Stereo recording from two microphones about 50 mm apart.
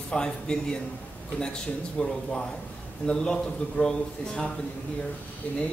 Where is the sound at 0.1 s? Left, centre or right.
Centre.